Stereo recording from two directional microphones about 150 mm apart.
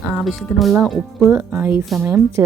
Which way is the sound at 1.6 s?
10° right (ahead or behind).